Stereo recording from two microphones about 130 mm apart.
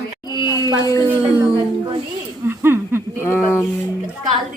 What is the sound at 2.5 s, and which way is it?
Laughter, 15° right (ahead or behind).